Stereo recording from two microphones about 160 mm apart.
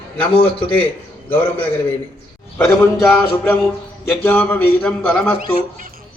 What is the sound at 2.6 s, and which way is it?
A man's voice, 10° left (ahead or behind).